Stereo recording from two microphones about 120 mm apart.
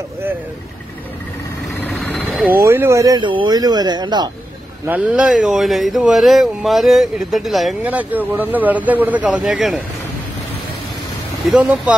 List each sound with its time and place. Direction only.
2.1 s vehicle: centre (ahead or behind)
2.4 s speech: 20° right (ahead or behind)
3.2 s speech: 40° right (ahead or behind)
4.8 s speech: 10° right (ahead or behind)
7.8 s speech: 15° right (ahead or behind)
11.4 s speech: 10° right (ahead or behind)